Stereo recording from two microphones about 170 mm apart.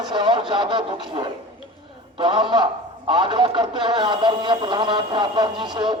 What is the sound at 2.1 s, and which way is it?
Speech, 30° right (ahead or behind).